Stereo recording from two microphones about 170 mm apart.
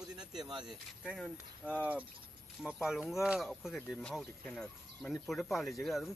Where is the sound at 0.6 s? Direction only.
5° right (ahead or behind).